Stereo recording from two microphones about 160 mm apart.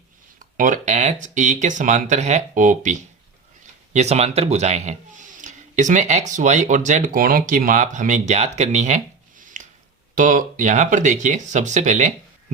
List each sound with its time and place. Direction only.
0.3 s speech: 55° right (ahead or behind)
9.4 s a sound: 50° right (ahead or behind)
10.2 s speech: 55° right (ahead or behind)